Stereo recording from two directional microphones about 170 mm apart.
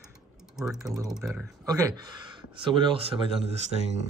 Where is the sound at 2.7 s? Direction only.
30° right (ahead or behind).